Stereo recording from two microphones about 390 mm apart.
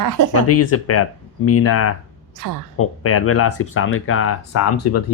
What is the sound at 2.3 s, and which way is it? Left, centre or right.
Speech, right.